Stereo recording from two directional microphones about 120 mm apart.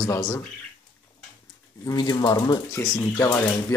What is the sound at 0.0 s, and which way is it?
Speech, 30° left (ahead or behind).